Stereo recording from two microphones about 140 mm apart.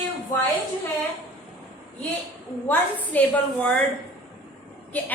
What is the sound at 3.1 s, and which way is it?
Speech, 10° left (ahead or behind).